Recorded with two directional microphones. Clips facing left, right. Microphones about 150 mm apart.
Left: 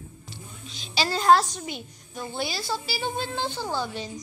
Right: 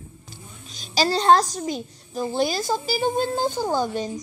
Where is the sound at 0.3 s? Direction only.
45° right (ahead or behind).